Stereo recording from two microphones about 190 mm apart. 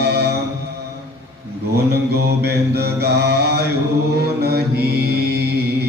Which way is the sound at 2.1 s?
60° right (ahead or behind).